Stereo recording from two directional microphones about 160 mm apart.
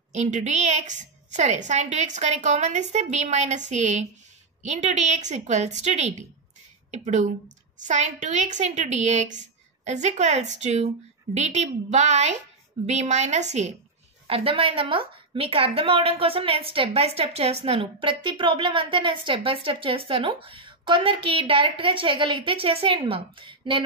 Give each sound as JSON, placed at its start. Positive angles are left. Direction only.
{"t": 0.1, "sound": "a woman's voice", "side_deg": -45}